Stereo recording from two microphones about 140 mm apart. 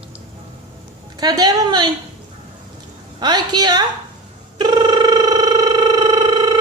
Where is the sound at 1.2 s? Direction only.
25° right (ahead or behind).